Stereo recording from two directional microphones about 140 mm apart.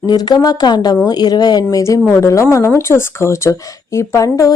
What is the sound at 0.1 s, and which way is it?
Speech, 30° left (ahead or behind).